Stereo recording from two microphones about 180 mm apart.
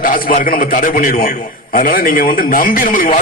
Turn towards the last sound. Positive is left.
turn(degrees=50)  # may be behind; listen again after turning